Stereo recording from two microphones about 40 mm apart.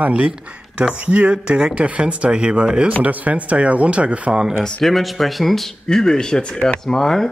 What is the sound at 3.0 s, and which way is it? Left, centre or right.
Speech, right.